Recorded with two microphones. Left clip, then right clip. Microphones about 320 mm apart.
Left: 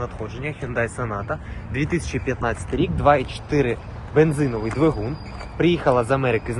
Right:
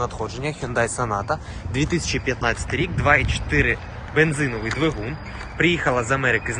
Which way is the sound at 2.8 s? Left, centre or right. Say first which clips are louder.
Left 1 dB; centre.